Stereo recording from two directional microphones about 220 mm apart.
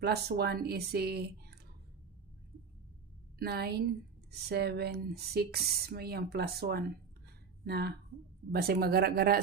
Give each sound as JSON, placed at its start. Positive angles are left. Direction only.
{"t": 0.0, "sound": "a woman's voice", "side_deg": -45}
{"t": 3.3, "sound": "a woman's voice", "side_deg": -45}